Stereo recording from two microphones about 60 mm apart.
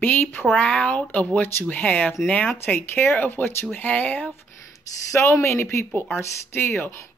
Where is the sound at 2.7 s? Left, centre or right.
Left.